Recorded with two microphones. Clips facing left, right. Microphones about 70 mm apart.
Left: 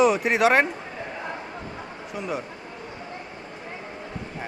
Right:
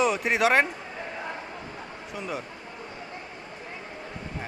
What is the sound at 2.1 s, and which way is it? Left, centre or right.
Speech, centre.